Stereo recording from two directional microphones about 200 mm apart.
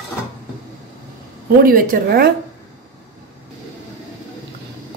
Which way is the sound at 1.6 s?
45° right (ahead or behind).